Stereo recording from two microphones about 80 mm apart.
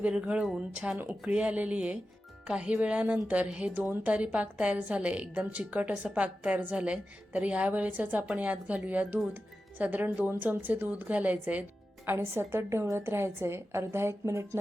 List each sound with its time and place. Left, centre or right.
0.0 s a woman's voice: centre; by 14.6 s right